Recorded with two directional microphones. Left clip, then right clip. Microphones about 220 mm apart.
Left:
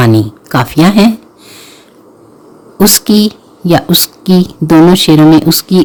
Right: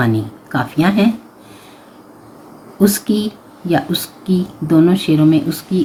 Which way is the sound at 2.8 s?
50° left (ahead or behind).